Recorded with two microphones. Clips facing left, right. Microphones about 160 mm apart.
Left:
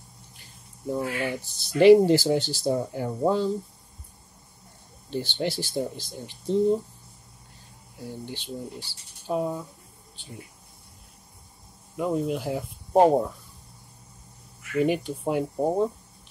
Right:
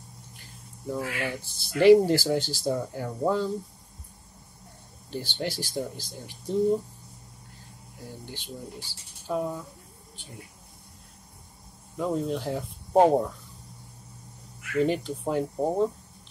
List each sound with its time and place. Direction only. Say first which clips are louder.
0.8 s speech: left 3 dB; 20° left (ahead or behind)
5.1 s speech: left 4 dB; 20° left (ahead or behind)
8.0 s speech: left 5 dB; 20° left (ahead or behind)
12.0 s speech: left 2 dB; 10° left (ahead or behind)
14.8 s speech: left 1 dB; 15° left (ahead or behind)